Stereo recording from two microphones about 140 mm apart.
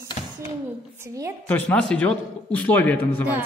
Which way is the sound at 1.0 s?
20° right (ahead or behind).